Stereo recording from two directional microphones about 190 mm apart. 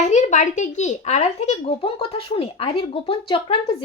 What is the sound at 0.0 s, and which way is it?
A child's voice, 40° left (ahead or behind).